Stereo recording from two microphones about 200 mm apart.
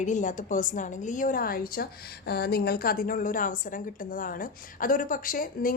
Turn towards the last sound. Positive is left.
turn(degrees=45)  # may be behind; listen again after turning